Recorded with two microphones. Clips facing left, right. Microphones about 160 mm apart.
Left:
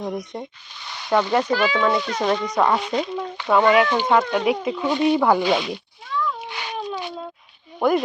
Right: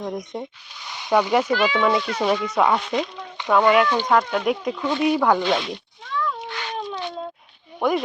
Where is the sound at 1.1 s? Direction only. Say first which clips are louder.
Even; 10° right (ahead or behind).